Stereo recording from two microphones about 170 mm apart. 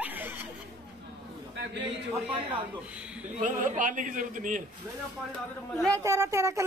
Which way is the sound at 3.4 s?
50° right (ahead or behind).